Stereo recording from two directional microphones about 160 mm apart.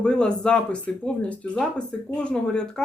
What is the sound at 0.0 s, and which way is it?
Speech, 5° left (ahead or behind).